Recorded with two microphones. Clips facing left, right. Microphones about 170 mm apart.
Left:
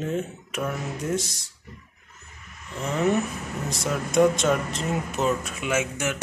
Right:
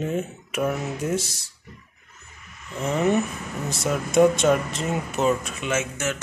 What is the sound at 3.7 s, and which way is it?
Speech, centre (ahead or behind).